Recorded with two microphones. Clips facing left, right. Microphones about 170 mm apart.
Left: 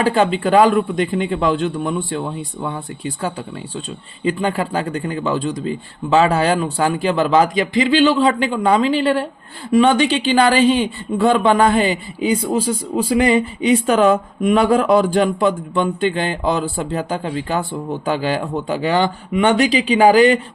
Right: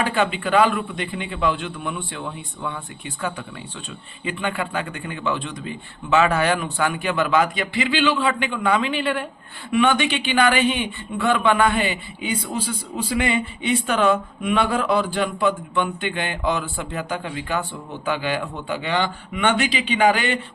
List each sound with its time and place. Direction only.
0.0 s a man's voice: 35° left (ahead or behind)